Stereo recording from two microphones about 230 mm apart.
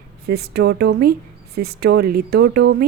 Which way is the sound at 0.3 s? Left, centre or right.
Right.